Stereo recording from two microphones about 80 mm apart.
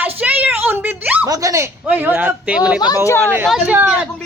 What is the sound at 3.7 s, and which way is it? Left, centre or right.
Speech, right.